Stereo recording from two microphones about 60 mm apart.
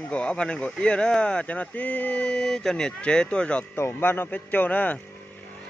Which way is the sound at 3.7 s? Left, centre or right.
Left.